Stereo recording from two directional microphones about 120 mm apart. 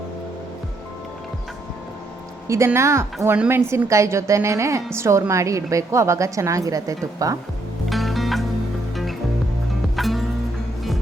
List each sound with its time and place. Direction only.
2.5 s a woman's voice: 25° right (ahead or behind)
7.9 s music: centre (ahead or behind)
9.9 s music: centre (ahead or behind)